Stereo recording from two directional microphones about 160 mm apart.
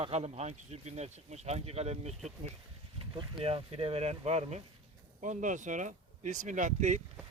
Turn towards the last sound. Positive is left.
turn(degrees=-50)  # may be behind; listen again after turning